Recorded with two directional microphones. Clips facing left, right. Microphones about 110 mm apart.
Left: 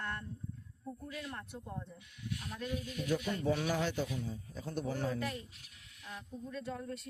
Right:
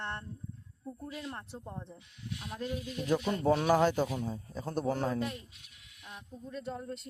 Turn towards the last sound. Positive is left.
turn(degrees=-25)  # may be behind; listen again after turning